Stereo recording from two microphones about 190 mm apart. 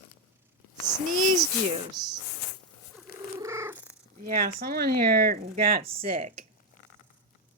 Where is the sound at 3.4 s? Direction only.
15° right (ahead or behind).